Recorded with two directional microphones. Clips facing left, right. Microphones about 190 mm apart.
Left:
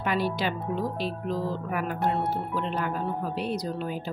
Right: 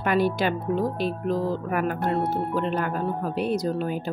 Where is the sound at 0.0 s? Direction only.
50° right (ahead or behind).